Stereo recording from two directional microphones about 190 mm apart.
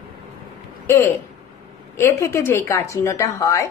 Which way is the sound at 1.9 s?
15° left (ahead or behind).